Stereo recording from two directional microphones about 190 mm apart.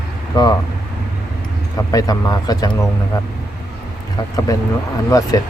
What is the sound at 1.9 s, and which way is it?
Speech, 20° left (ahead or behind).